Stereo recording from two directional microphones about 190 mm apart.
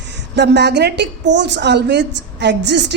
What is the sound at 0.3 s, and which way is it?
A woman's voice, 65° right (ahead or behind).